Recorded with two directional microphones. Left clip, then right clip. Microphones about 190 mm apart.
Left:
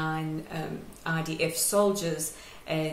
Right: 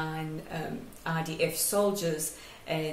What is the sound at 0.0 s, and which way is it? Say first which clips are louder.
Speech: left 4 dB; 10° left (ahead or behind).